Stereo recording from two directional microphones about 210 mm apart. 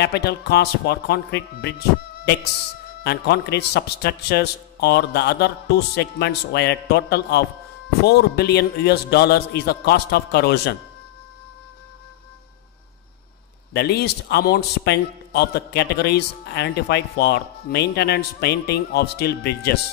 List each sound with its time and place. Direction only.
0.0 s a man's voice: 50° left (ahead or behind)
3.0 s a man's voice: 50° left (ahead or behind)
13.7 s a man's voice: 50° left (ahead or behind)